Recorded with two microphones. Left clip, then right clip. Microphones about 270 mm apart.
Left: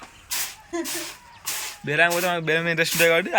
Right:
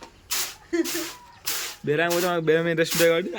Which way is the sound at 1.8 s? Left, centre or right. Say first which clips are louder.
Left 3 dB; centre.